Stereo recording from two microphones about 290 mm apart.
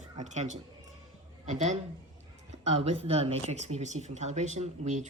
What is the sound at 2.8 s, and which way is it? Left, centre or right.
Speech, right.